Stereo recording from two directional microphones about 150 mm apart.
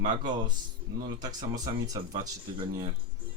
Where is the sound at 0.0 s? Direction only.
30° right (ahead or behind).